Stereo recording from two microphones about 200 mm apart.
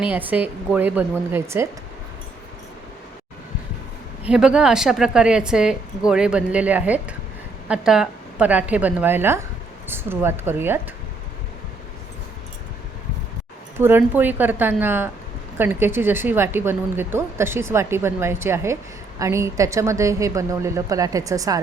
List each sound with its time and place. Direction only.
0.1 s a woman's voice: 10° right (ahead or behind)
4.3 s a woman's voice: 5° right (ahead or behind)
13.7 s a woman's voice: 10° right (ahead or behind)